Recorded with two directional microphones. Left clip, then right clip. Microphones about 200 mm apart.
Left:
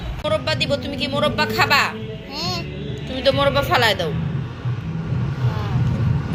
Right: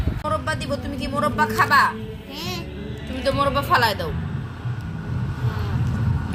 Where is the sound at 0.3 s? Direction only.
5° right (ahead or behind).